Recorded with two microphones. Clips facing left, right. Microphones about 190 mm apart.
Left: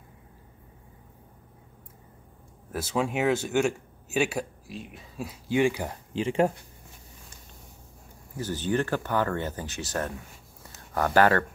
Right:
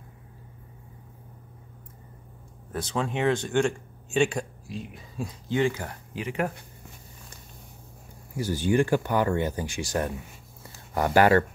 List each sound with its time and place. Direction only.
2.7 s speech: 5° left (ahead or behind)
6.1 s speech: 30° left (ahead or behind)
8.4 s speech: 10° right (ahead or behind)